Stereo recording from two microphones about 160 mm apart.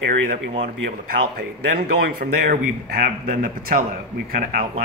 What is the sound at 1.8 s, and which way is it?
Speech, 80° right.